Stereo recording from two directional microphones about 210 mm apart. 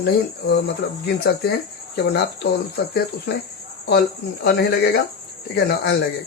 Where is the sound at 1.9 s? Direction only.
50° left (ahead or behind).